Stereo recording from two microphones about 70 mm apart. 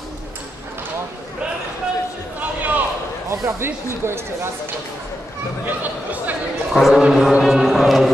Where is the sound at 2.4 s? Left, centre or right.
Right.